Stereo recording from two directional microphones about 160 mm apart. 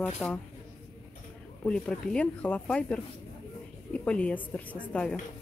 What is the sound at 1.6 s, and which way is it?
A woman's voice, 10° left (ahead or behind).